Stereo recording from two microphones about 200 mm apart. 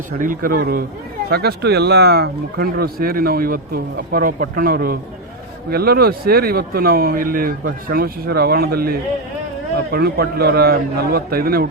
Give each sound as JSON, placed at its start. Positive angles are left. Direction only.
{"t": 0.2, "sound": "a man's voice", "side_deg": -45}